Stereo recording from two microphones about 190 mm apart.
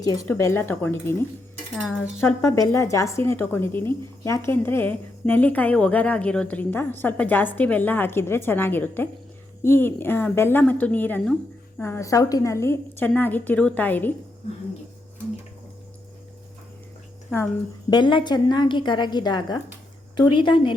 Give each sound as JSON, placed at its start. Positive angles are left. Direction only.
{"t": 0.0, "sound": "a woman's voice", "side_deg": 20}
{"t": 2.1, "sound": "a woman's voice", "side_deg": 15}
{"t": 17.3, "sound": "a woman's voice", "side_deg": -5}
{"t": 17.9, "sound": "a woman's voice", "side_deg": 25}